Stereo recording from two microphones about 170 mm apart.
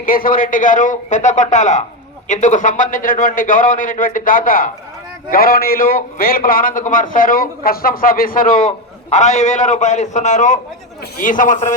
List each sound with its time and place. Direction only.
0.0 s a man's voice: 55° left (ahead or behind)
8.6 s a man's voice: 40° left (ahead or behind)